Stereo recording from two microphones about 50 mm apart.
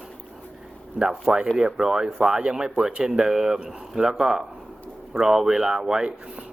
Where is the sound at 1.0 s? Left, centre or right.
Centre.